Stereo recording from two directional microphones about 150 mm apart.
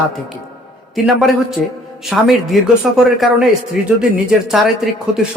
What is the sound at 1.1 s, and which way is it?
Speech, centre (ahead or behind).